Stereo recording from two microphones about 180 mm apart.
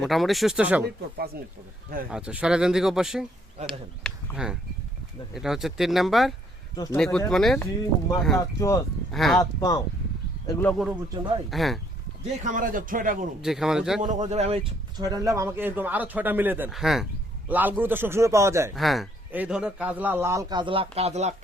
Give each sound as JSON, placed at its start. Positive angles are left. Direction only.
{"t": 0.0, "sound": "speech", "side_deg": 0}
{"t": 2.0, "sound": "speech", "side_deg": -5}
{"t": 4.0, "sound": "a sound", "side_deg": -5}
{"t": 5.3, "sound": "speech", "side_deg": 0}
{"t": 7.6, "sound": "speech", "side_deg": 20}
{"t": 9.1, "sound": "speech", "side_deg": 0}
{"t": 9.4, "sound": "speech", "side_deg": 20}
{"t": 10.7, "sound": "speech", "side_deg": 0}
{"t": 12.4, "sound": "speech", "side_deg": -45}
{"t": 13.4, "sound": "speech", "side_deg": 0}
{"t": 14.0, "sound": "speech", "side_deg": -40}
{"t": 15.0, "sound": "a man's voice", "side_deg": -20}
{"t": 18.7, "sound": "a man's voice", "side_deg": 0}